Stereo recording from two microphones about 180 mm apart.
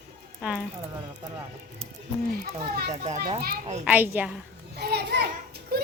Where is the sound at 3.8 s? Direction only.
10° right (ahead or behind).